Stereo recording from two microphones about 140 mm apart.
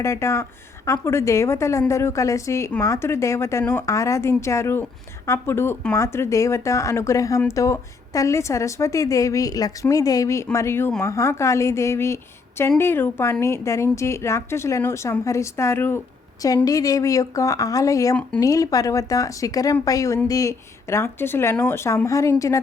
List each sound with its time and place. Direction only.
0.0 s a woman's voice: 20° left (ahead or behind)